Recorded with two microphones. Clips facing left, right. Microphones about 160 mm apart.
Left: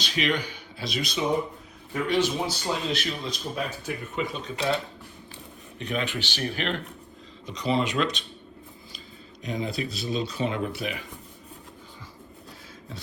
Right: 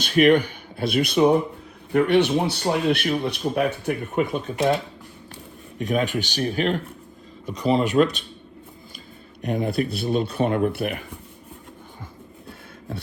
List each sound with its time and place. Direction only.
0.0 s speech: 55° right (ahead or behind)
5.8 s speech: 45° right (ahead or behind)
9.4 s speech: 60° right (ahead or behind)